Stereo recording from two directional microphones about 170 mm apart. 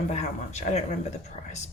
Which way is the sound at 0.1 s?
40° left (ahead or behind).